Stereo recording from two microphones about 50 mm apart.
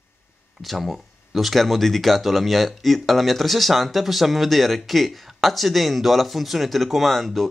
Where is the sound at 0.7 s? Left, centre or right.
Centre.